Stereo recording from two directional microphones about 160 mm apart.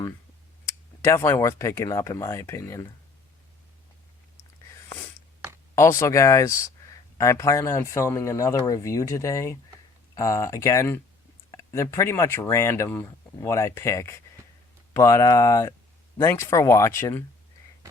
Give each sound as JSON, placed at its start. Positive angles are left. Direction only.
{"t": 0.6, "sound": "speech", "side_deg": 15}
{"t": 5.7, "sound": "speech", "side_deg": 15}